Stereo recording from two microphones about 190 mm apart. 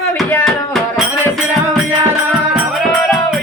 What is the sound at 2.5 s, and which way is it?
Music, centre (ahead or behind).